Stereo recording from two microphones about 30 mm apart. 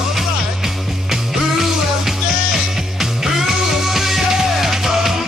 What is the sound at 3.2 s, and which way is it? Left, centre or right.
Music, centre.